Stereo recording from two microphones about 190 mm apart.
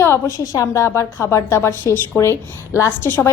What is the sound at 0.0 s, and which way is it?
A woman's voice, 15° left (ahead or behind).